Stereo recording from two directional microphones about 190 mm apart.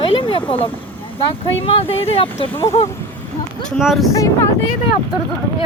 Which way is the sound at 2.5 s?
15° left (ahead or behind).